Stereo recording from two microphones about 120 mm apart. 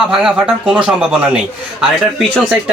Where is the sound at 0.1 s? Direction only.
5° right (ahead or behind).